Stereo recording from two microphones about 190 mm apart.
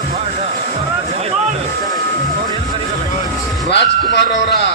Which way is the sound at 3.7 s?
65° left (ahead or behind).